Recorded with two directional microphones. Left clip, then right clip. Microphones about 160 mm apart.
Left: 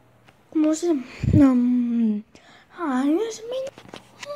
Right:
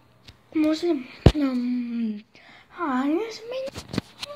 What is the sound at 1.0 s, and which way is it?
Speech, 45° left (ahead or behind).